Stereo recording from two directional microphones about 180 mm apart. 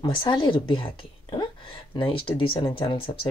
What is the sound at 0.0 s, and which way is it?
Speech, 25° left (ahead or behind).